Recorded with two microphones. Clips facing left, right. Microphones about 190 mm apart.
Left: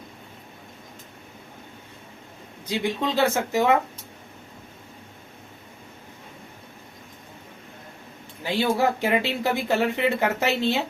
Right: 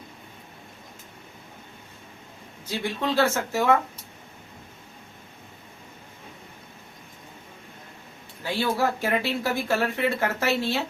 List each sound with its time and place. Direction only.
2.6 s speech: 15° left (ahead or behind)
8.4 s speech: 15° left (ahead or behind)